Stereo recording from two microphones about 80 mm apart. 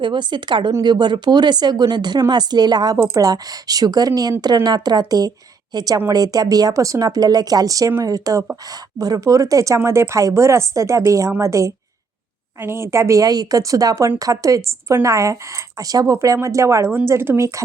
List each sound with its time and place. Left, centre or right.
0.0 s speech: right
0.8 s speech: right